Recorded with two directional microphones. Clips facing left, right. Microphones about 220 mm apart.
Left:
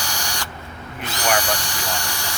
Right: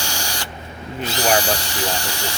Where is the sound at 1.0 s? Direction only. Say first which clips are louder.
Right 3 dB; 30° right (ahead or behind).